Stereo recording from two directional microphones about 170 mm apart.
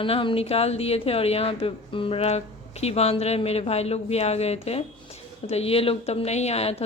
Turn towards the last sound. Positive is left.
turn(degrees=35)  # may be behind; listen again after turning